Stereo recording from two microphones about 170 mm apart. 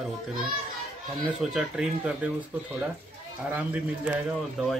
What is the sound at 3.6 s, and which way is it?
A man's voice, 10° right (ahead or behind).